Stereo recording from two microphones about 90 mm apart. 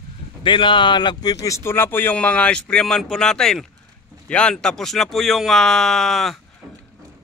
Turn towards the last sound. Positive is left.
turn(degrees=0)  # may be behind; listen again after turning